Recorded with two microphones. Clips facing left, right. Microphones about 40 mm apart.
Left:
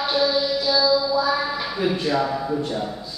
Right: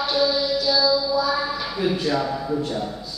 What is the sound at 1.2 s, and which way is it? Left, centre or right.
A man's voice, centre.